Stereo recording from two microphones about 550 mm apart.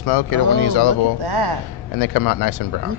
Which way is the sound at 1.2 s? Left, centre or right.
Right.